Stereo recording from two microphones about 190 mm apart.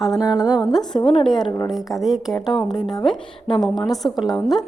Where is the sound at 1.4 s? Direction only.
25° left (ahead or behind).